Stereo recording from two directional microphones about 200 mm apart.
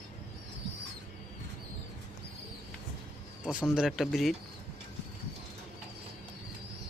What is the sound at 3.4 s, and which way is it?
Speech, 5° right (ahead or behind).